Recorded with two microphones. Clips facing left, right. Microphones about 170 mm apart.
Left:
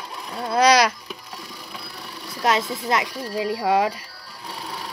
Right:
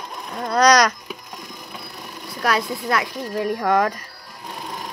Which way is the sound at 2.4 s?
20° left (ahead or behind).